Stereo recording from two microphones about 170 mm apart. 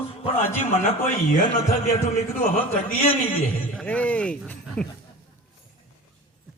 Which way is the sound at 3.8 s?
10° left (ahead or behind).